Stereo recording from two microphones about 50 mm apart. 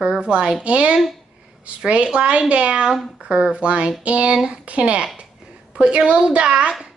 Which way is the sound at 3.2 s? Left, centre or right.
Right.